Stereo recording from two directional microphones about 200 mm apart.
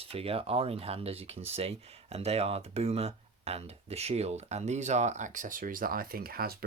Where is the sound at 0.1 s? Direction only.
30° right (ahead or behind).